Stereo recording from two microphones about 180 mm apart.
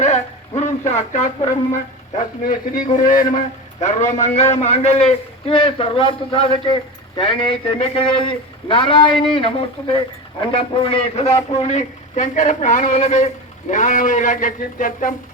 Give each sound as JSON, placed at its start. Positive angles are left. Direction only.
{"t": 0.0, "sound": "a man's voice", "side_deg": 40}